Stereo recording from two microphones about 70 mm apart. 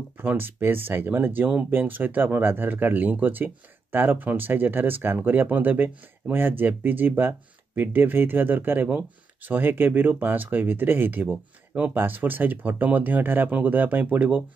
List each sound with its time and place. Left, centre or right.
0.2 s speech: right